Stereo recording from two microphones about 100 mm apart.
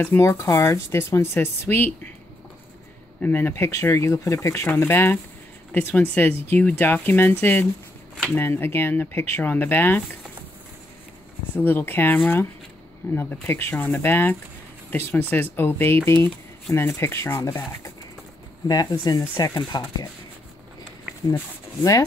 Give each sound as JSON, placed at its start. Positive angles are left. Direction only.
{"t": 0.0, "sound": "speech", "side_deg": 25}
{"t": 3.2, "sound": "speech", "side_deg": 20}
{"t": 11.5, "sound": "speech", "side_deg": 20}
{"t": 18.7, "sound": "speech", "side_deg": 40}